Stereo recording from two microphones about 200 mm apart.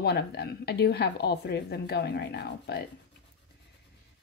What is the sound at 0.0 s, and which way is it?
A woman's voice, 55° left (ahead or behind).